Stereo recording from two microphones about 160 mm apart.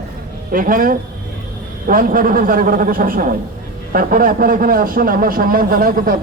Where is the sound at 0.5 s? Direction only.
60° right (ahead or behind).